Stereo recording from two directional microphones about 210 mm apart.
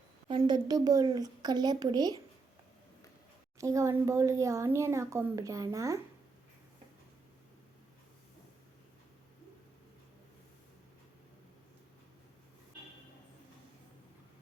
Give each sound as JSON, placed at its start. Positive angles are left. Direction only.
{"t": 0.3, "sound": "a child's voice", "side_deg": -20}
{"t": 3.6, "sound": "speech", "side_deg": -15}